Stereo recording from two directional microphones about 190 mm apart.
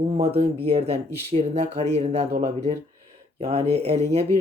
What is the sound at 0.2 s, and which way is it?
Speech, 30° right (ahead or behind).